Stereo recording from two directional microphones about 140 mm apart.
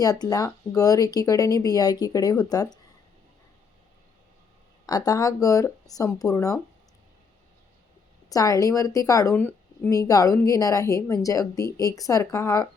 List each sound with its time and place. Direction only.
0.0 s speech: 25° left (ahead or behind)
4.9 s speech: 25° left (ahead or behind)
8.3 s speech: 25° left (ahead or behind)